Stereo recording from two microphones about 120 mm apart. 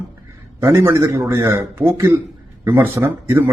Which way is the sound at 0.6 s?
25° right (ahead or behind).